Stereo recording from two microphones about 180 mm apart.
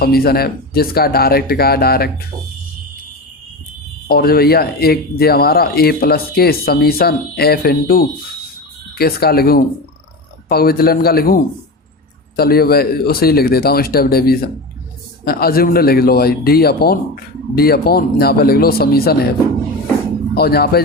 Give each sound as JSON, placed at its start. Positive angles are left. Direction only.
{"t": 0.0, "sound": "speech", "side_deg": 60}
{"t": 4.1, "sound": "speech", "side_deg": 60}
{"t": 12.4, "sound": "speech", "side_deg": 60}
{"t": 20.3, "sound": "speech", "side_deg": 60}